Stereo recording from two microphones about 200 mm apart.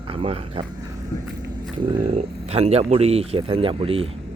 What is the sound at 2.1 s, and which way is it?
Speech, 30° right (ahead or behind).